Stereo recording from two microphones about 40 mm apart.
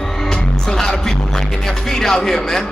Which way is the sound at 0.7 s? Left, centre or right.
Centre.